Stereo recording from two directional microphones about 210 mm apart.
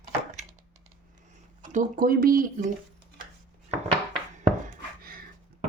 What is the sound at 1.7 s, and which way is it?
Speech, 45° right (ahead or behind).